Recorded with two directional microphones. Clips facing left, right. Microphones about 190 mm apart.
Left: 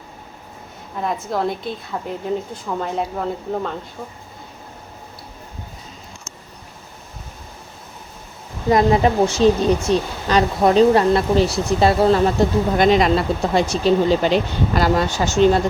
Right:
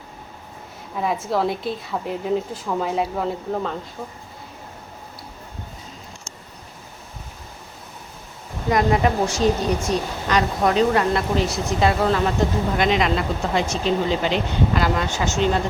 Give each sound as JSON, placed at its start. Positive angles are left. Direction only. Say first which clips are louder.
{"t": 0.9, "sound": "a woman's voice", "louder": "right 1 dB", "side_deg": -5}
{"t": 8.7, "sound": "speech", "louder": "left 4 dB", "side_deg": 25}